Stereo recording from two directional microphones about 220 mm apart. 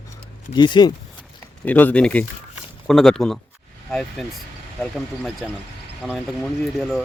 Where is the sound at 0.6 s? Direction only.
20° left (ahead or behind).